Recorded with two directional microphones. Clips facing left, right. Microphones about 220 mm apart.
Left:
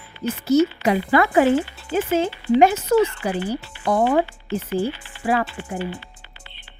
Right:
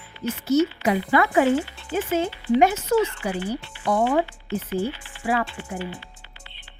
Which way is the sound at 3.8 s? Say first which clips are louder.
Left 2 dB; 45° left (ahead or behind).